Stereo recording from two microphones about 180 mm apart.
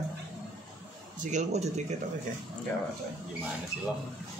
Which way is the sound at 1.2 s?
40° right (ahead or behind).